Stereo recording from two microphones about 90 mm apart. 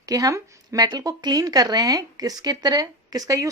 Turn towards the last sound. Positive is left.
turn(degrees=-45)  # may be behind; listen again after turning